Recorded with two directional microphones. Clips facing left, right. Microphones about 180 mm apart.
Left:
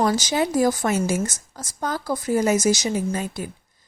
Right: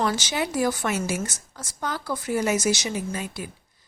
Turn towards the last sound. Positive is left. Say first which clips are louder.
# left 5 dB
turn(degrees=45)  # may be behind; listen again after turning